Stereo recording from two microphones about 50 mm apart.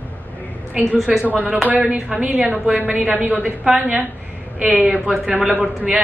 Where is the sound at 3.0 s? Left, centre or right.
Right.